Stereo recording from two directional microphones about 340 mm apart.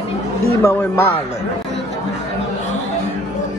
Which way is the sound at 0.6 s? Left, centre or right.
Centre.